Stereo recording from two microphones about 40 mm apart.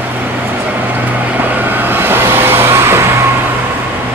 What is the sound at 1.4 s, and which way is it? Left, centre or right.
Vehicle, right.